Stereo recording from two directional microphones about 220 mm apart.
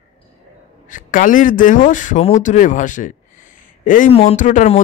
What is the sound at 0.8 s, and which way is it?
A man's voice, 35° left (ahead or behind).